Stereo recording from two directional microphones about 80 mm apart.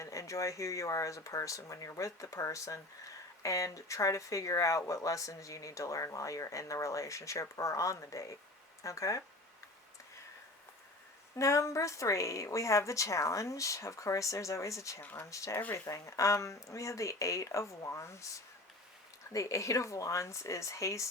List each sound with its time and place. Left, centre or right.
0.0 s speech: left
11.3 s a woman's voice: left
15.0 s speech: left
15.3 s a woman's voice: left